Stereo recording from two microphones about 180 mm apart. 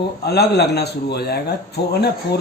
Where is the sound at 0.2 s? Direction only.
65° left (ahead or behind).